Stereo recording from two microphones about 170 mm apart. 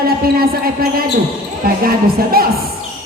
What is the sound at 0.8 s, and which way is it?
Speech, 65° right (ahead or behind).